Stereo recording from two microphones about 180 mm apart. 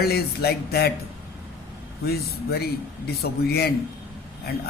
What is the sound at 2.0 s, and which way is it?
A man's voice, 60° left (ahead or behind).